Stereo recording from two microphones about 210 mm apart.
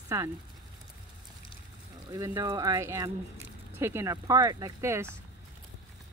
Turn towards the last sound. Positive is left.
turn(degrees=-15)  # may be behind; listen again after turning